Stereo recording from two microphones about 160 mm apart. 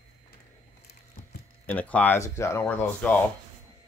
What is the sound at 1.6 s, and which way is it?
Speech, 10° left (ahead or behind).